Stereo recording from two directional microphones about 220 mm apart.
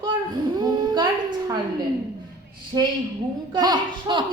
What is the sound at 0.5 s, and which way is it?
Speech, 20° right (ahead or behind).